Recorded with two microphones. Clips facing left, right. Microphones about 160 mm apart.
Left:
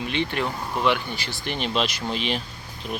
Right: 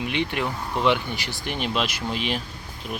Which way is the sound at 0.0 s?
15° right (ahead or behind).